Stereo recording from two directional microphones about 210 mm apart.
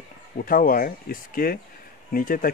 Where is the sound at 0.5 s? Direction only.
40° left (ahead or behind).